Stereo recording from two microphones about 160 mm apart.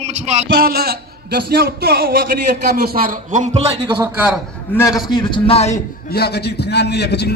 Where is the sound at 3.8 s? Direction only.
30° right (ahead or behind).